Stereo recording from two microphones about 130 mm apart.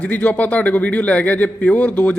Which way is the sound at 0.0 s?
10° left (ahead or behind).